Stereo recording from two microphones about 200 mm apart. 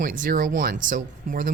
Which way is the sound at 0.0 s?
45° right (ahead or behind).